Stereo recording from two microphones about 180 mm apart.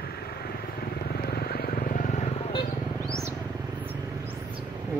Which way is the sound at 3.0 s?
15° right (ahead or behind).